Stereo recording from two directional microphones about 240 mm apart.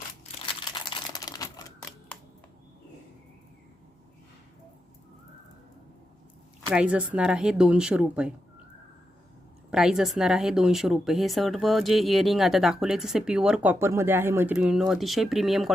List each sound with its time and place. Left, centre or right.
0.6 s computer keyboard: centre
6.7 s speech: centre
9.6 s speech: centre